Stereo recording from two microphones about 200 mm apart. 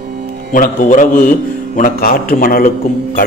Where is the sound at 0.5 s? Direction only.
40° left (ahead or behind).